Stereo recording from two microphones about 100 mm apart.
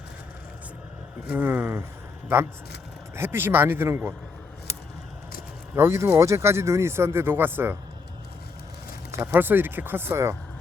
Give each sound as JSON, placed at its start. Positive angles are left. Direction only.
{"t": 1.3, "sound": "speech", "side_deg": -20}
{"t": 3.2, "sound": "speech", "side_deg": -20}
{"t": 5.7, "sound": "speech", "side_deg": -25}
{"t": 9.1, "sound": "speech", "side_deg": -20}